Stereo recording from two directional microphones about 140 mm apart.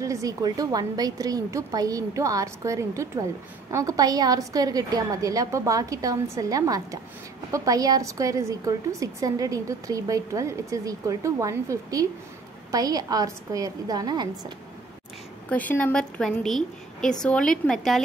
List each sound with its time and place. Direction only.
0.0 s a woman's voice: 25° right (ahead or behind)
15.5 s a woman's voice: 10° left (ahead or behind)